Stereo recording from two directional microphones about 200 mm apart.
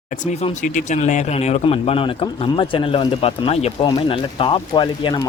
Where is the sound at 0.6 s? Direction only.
40° left (ahead or behind).